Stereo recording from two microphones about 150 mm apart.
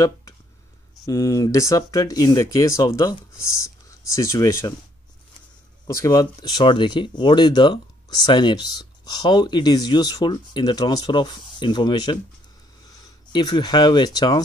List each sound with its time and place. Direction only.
1.0 s speech: 20° left (ahead or behind)
5.9 s speech: 25° left (ahead or behind)